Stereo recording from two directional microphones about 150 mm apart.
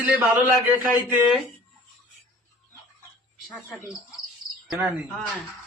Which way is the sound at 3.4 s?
Centre (ahead or behind).